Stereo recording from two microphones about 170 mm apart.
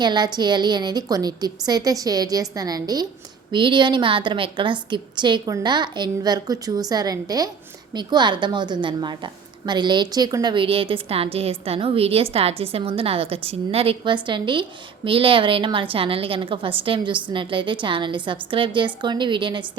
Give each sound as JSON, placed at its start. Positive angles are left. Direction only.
{"t": 0.0, "sound": "a woman's voice", "side_deg": -25}